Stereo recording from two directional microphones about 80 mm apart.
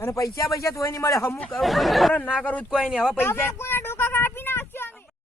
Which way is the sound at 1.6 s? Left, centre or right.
Centre.